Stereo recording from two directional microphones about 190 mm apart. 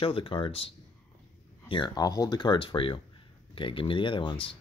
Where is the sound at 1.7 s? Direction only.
25° left (ahead or behind).